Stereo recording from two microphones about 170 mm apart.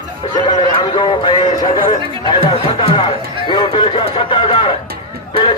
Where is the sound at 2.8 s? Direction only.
25° left (ahead or behind).